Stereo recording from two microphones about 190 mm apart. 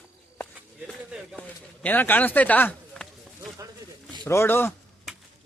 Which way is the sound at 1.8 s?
10° left (ahead or behind).